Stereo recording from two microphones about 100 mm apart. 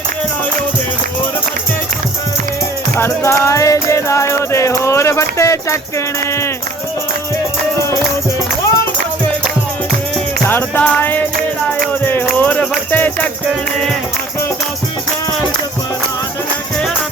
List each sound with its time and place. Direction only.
3.0 s music: 30° left (ahead or behind)
10.5 s music: 20° left (ahead or behind)
12.4 s music: 15° left (ahead or behind)